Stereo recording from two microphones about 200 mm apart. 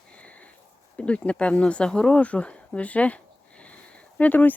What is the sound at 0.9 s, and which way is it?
Speech, 5° left (ahead or behind).